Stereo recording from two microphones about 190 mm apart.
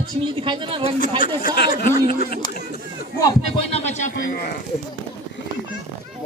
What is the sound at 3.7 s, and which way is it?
Speech, 35° left (ahead or behind).